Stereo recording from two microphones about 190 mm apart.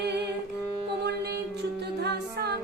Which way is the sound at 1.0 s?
60° right (ahead or behind).